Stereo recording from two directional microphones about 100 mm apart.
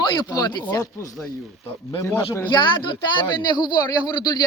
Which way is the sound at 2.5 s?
50° left (ahead or behind).